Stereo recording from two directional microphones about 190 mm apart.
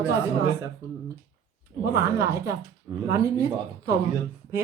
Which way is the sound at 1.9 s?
15° right (ahead or behind).